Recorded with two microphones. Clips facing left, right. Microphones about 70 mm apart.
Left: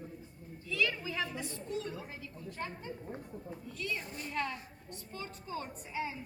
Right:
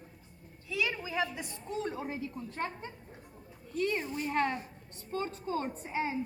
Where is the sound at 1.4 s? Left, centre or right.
Right.